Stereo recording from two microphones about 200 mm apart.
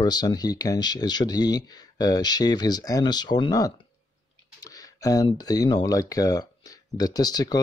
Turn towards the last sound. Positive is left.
turn(degrees=20)  # may be behind; listen again after turning